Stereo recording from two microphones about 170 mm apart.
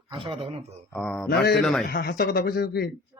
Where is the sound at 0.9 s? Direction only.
5° left (ahead or behind).